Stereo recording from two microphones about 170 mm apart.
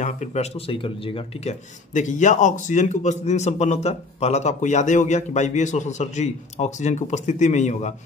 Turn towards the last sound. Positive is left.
turn(degrees=45)  # may be behind; listen again after turning